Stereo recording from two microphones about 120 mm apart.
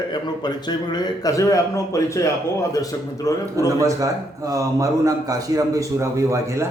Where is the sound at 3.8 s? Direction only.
25° right (ahead or behind).